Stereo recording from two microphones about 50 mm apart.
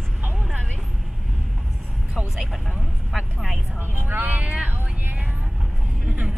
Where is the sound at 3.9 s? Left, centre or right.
Right.